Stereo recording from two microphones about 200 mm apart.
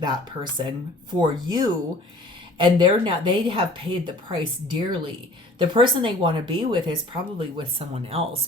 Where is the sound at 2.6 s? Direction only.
25° right (ahead or behind).